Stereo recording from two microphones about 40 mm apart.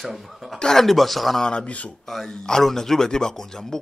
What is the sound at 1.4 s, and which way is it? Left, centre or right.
Speech, left.